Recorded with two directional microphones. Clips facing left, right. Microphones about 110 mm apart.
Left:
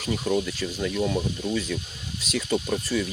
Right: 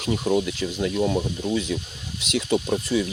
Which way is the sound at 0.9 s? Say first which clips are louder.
Right 3 dB; 25° right (ahead or behind).